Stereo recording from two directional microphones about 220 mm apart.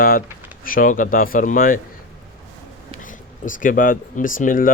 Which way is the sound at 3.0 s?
35° left (ahead or behind).